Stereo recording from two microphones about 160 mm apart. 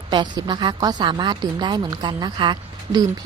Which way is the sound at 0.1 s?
30° right (ahead or behind).